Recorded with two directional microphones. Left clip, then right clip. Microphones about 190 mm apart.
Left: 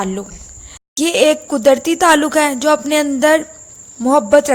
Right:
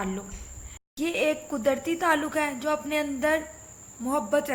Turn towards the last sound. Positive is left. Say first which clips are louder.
# left 15 dB
turn(degrees=55)  # may be behind; listen again after turning